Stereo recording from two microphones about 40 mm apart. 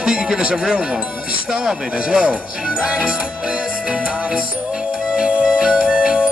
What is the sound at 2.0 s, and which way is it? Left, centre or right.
Speech, right.